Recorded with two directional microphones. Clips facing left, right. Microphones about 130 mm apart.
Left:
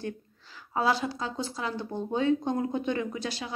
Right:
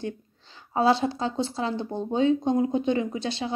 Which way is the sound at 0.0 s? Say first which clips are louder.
Right 3 dB; 25° right (ahead or behind).